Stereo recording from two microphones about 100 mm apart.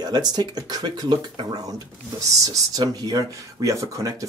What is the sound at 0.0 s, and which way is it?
Speech, 40° right (ahead or behind).